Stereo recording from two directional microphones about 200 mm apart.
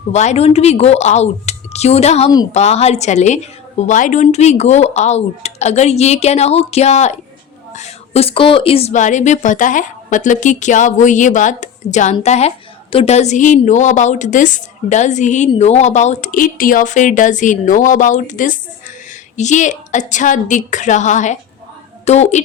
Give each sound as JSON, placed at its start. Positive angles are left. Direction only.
{"t": 0.1, "sound": "a woman's voice", "side_deg": 35}